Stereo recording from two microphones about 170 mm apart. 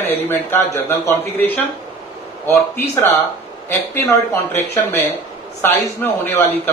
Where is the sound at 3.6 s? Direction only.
15° left (ahead or behind).